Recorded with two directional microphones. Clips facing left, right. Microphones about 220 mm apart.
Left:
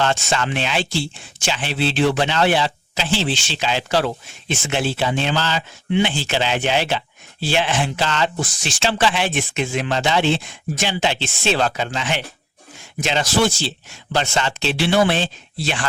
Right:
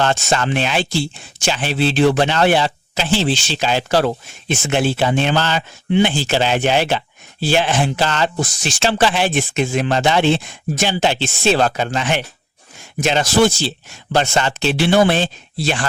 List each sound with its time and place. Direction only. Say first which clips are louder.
0.0 s speech: right 3 dB; 45° right (ahead or behind)
5.9 s speech: right 4 dB; 40° right (ahead or behind)